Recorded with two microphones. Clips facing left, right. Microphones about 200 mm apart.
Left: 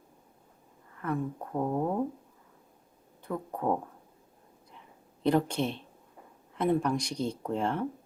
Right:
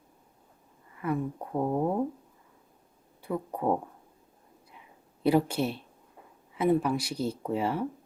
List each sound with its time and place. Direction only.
0.9 s speech: 10° right (ahead or behind)
3.2 s speech: 10° right (ahead or behind)
5.2 s speech: 10° right (ahead or behind)